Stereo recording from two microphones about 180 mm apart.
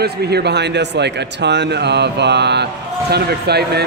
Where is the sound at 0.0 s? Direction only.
65° right (ahead or behind).